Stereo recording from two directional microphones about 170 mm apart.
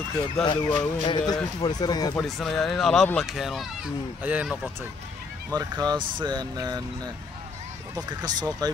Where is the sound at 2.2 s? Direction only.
Centre (ahead or behind).